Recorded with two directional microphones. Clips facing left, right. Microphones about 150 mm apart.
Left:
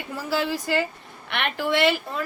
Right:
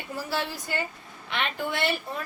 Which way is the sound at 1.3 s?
75° left (ahead or behind).